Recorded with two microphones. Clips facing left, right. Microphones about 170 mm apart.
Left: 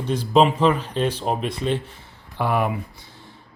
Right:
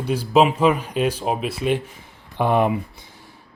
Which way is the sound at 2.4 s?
25° right (ahead or behind).